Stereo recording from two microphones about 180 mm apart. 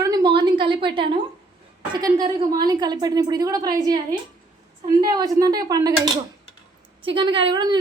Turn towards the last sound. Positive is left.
turn(degrees=-25)  # may be behind; listen again after turning